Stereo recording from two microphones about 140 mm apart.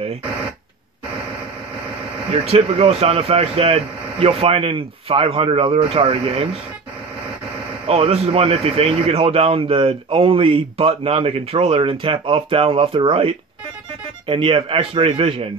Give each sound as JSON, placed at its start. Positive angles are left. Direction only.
{"t": 2.4, "sound": "speech", "side_deg": -45}
{"t": 7.8, "sound": "a man's voice", "side_deg": -45}